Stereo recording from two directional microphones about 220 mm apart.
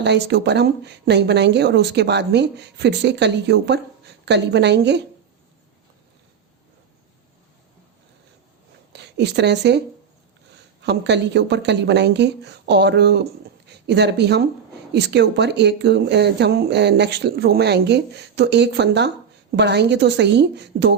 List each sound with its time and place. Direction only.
0.0 s speech: 50° right (ahead or behind)
8.9 s speech: 50° right (ahead or behind)
10.8 s speech: 50° right (ahead or behind)